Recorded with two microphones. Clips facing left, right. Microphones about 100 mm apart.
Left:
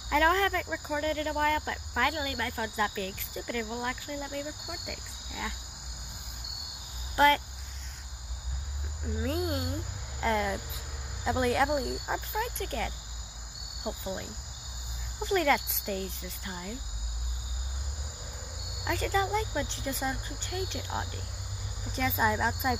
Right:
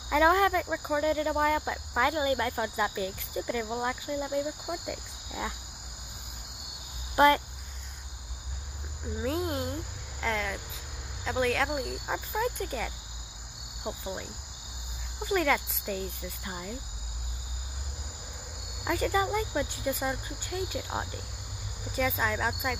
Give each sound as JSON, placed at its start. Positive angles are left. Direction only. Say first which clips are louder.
{"t": 0.1, "sound": "speech", "louder": "right 2 dB", "side_deg": -15}
{"t": 7.2, "sound": "speech", "louder": "right 2 dB", "side_deg": -15}
{"t": 9.2, "sound": "speech", "louder": "right 1 dB", "side_deg": 0}
{"t": 10.2, "sound": "cricket", "louder": "left 3 dB", "side_deg": 10}
{"t": 11.3, "sound": "speech", "louder": "left 1 dB", "side_deg": 10}
{"t": 12.4, "sound": "speech", "louder": "right 4 dB", "side_deg": -10}
{"t": 18.9, "sound": "speech", "louder": "right 1 dB", "side_deg": -10}
{"t": 21.9, "sound": "speech", "louder": "right 2 dB", "side_deg": 0}
{"t": 22.2, "sound": "cricket", "louder": "left 2 dB", "side_deg": 10}